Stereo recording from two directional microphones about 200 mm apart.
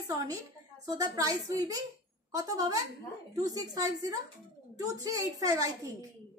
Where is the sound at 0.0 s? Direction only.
15° right (ahead or behind).